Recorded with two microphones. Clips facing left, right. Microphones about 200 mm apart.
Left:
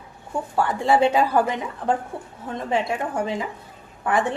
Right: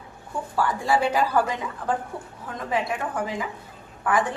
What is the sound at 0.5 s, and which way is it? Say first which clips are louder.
A woman's voice: left 3 dB; 25° left (ahead or behind).